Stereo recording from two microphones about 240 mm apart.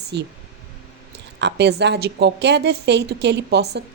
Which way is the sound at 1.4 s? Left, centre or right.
Right.